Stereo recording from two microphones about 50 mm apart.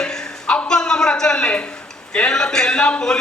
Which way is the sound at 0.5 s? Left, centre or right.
Centre.